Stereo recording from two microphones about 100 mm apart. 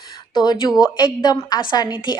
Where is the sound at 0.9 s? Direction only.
45° left (ahead or behind).